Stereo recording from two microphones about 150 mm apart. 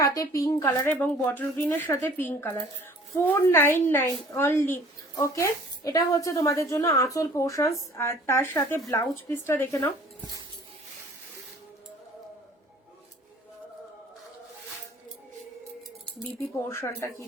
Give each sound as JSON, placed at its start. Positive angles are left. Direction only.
{"t": 0.0, "sound": "a woman's voice", "side_deg": 25}
{"t": 16.6, "sound": "speech", "side_deg": 20}